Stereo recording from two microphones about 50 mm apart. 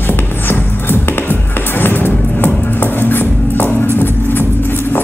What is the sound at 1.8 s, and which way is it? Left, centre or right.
Music, left.